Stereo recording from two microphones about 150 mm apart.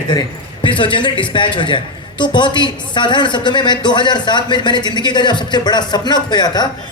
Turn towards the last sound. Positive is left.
turn(degrees=30)  # may be behind; listen again after turning